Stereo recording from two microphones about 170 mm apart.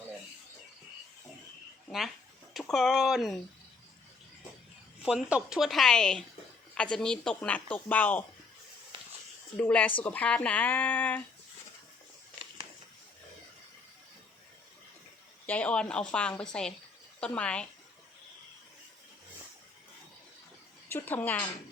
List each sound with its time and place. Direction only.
2.5 s a woman's voice: centre (ahead or behind)
5.0 s a woman's voice: 5° right (ahead or behind)
8.9 s a sound: 30° right (ahead or behind)
9.6 s speech: 10° left (ahead or behind)
15.4 s a woman's voice: 10° left (ahead or behind)
20.9 s speech: 10° left (ahead or behind)